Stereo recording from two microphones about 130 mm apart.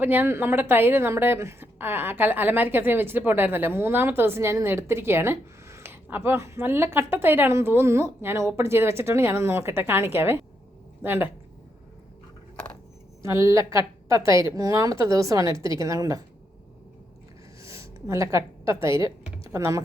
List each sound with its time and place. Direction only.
0.0 s a woman's voice: 15° right (ahead or behind)
13.2 s a woman's voice: 25° right (ahead or behind)
17.6 s a sound: 25° right (ahead or behind)